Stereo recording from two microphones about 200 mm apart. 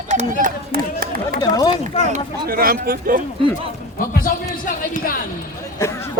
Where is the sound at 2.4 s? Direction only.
45° right (ahead or behind).